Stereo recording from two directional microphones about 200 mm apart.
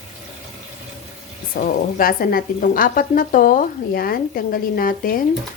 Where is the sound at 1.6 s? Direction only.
45° left (ahead or behind).